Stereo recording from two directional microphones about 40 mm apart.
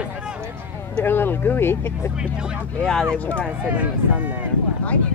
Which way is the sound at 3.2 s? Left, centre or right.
Left.